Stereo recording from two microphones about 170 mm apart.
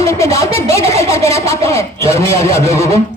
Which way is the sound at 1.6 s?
15° left (ahead or behind).